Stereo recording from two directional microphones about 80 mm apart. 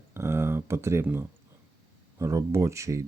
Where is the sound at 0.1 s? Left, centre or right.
Right.